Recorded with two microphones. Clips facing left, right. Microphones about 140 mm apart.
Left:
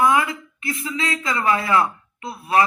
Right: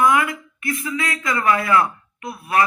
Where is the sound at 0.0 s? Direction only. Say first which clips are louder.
Right 1 dB; 25° left (ahead or behind).